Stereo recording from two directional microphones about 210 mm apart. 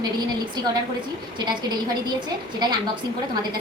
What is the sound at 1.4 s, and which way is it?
A woman's voice, 20° right (ahead or behind).